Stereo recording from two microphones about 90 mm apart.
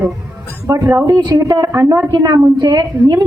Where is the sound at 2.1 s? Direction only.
45° right (ahead or behind).